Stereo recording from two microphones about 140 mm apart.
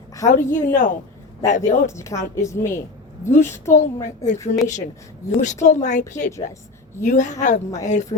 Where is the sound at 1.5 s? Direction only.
65° left (ahead or behind).